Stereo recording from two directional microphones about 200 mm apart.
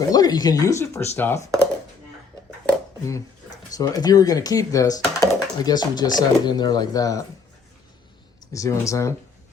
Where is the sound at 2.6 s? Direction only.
15° left (ahead or behind).